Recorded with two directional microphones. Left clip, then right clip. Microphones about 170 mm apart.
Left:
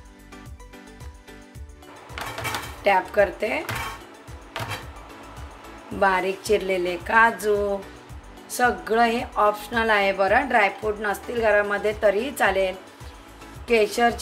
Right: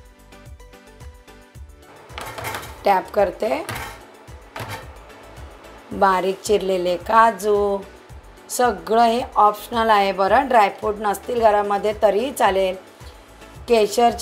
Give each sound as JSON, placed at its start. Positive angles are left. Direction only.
{"t": 2.8, "sound": "a woman's voice", "side_deg": -25}
{"t": 5.9, "sound": "a woman's voice", "side_deg": -25}